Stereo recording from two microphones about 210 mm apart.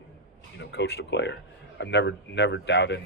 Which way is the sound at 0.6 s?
55° left (ahead or behind).